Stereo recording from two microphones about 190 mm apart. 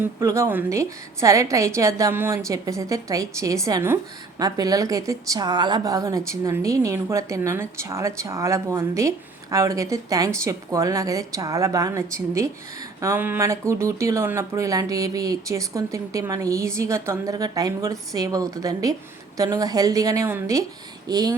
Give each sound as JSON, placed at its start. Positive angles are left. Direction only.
{"t": 0.0, "sound": "a woman's voice", "side_deg": -15}